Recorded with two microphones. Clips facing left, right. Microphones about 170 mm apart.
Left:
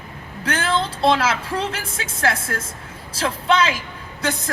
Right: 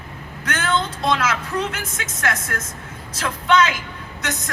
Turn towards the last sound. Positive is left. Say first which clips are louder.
# left 4 dB
turn(degrees=30)  # may be behind; listen again after turning